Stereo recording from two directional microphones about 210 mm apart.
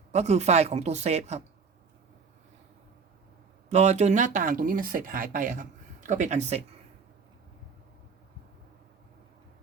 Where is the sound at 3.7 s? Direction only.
30° right (ahead or behind).